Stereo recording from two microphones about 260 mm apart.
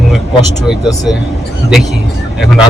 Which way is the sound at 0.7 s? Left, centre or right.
Centre.